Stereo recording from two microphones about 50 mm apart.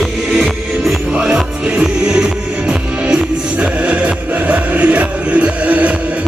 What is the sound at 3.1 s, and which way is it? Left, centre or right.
Music, right.